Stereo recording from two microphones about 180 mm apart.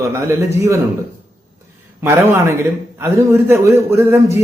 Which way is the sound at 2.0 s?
15° right (ahead or behind).